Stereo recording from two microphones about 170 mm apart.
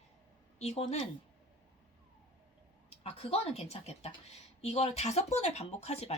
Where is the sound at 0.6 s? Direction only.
40° left (ahead or behind).